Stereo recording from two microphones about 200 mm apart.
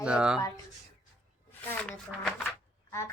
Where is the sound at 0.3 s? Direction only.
20° left (ahead or behind).